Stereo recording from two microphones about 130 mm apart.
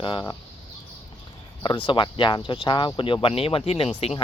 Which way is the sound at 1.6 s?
40° left (ahead or behind).